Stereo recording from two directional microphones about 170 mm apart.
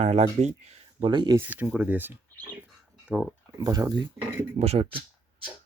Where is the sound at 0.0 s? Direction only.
40° right (ahead or behind).